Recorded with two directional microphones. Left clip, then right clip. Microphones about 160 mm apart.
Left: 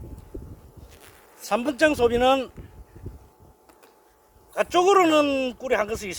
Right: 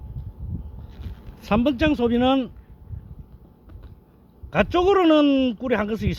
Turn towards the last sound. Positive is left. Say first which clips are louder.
# even
turn(degrees=-25)  # may be behind; listen again after turning